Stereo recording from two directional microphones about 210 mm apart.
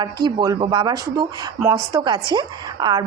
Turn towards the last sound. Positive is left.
turn(degrees=-20)  # may be behind; listen again after turning